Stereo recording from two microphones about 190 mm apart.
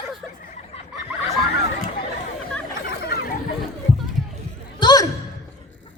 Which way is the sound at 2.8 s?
55° left (ahead or behind).